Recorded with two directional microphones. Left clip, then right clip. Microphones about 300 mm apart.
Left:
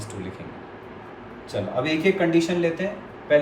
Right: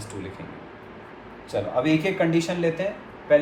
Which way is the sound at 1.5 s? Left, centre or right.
Centre.